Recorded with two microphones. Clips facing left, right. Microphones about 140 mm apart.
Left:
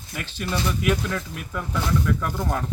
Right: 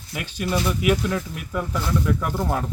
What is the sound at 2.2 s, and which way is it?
Speech, 15° right (ahead or behind).